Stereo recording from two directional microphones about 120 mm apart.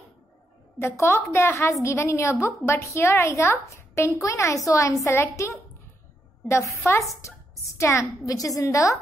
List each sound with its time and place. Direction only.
0.7 s a woman's voice: 20° left (ahead or behind)